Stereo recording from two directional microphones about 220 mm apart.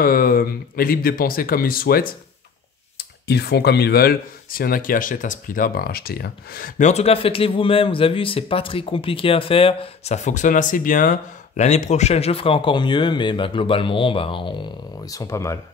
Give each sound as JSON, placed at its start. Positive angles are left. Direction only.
{"t": 0.0, "sound": "speech", "side_deg": 40}